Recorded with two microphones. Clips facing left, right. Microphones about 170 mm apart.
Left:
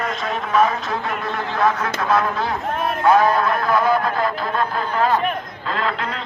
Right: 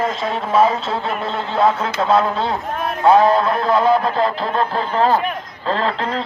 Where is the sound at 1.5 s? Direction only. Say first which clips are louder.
Right 4 dB; 25° right (ahead or behind).